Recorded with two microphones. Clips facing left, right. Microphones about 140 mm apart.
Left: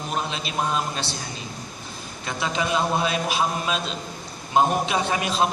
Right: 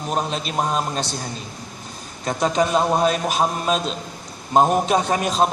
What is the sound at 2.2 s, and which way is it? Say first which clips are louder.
A man's voice: right 7 dB; 40° right (ahead or behind).